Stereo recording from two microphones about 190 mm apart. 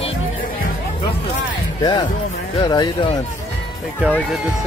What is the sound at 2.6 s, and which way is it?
Speech, 20° left (ahead or behind).